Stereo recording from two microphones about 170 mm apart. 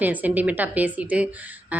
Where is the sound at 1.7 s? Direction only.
10° right (ahead or behind).